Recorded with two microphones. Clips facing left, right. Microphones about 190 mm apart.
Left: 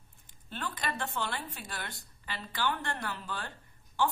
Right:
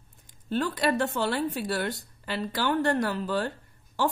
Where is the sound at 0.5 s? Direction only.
40° right (ahead or behind).